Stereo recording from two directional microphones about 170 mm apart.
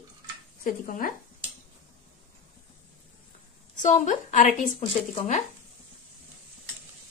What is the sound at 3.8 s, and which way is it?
Speech, 45° left (ahead or behind).